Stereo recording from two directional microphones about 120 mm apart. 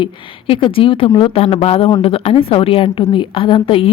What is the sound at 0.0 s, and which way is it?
A woman's voice, 45° left (ahead or behind).